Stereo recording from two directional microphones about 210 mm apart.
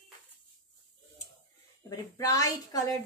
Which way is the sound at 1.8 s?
15° left (ahead or behind).